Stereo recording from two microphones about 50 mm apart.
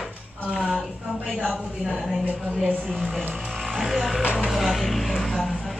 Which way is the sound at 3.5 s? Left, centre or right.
Centre.